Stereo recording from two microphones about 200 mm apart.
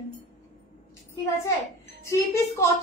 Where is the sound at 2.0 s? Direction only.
15° left (ahead or behind).